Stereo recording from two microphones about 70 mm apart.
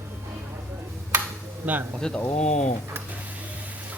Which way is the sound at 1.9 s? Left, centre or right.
Centre.